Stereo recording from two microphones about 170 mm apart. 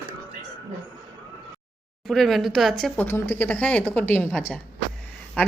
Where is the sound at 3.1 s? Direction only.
15° left (ahead or behind).